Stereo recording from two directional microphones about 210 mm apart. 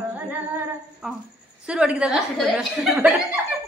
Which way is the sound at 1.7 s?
5° right (ahead or behind).